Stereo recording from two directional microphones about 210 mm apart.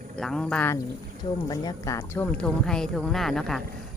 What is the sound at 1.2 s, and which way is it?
Speech, 20° left (ahead or behind).